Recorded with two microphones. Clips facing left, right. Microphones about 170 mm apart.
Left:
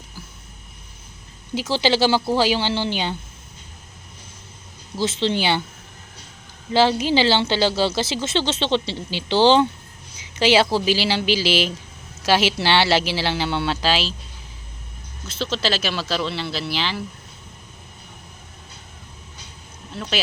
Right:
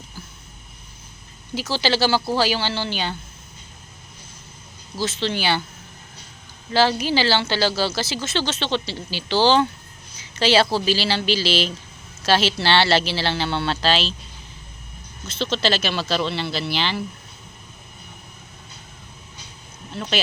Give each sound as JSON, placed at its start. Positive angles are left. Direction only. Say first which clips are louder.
{"t": 1.5, "sound": "speech", "louder": "left 2 dB", "side_deg": 20}
{"t": 4.9, "sound": "speech", "louder": "left 3 dB", "side_deg": 20}
{"t": 6.7, "sound": "speech", "louder": "left 2 dB", "side_deg": 20}
{"t": 15.3, "sound": "speech", "louder": "right 2 dB", "side_deg": 5}
{"t": 19.9, "sound": "speech", "louder": "right 1 dB", "side_deg": 0}